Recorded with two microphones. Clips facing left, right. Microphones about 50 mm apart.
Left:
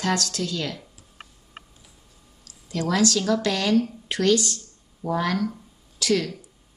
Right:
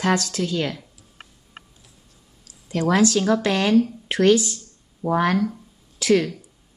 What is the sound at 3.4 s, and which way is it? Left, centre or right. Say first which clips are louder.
Speech: right 3 dB; right.